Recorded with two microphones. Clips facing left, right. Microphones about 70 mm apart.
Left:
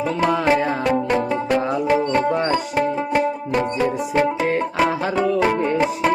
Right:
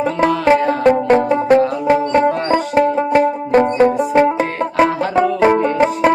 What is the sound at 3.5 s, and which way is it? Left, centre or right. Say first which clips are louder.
Music: right 10 dB; right.